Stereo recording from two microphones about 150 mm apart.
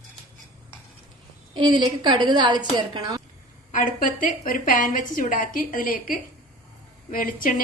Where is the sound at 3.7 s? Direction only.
60° left (ahead or behind).